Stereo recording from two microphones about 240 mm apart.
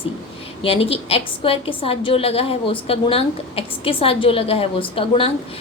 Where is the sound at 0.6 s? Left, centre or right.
Left.